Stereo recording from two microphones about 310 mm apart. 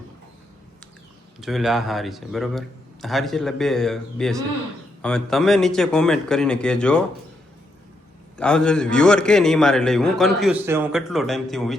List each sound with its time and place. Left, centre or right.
1.4 s a man's voice: centre
8.4 s a man's voice: centre